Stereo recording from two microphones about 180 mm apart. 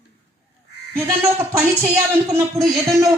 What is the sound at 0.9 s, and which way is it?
Speech, 15° right (ahead or behind).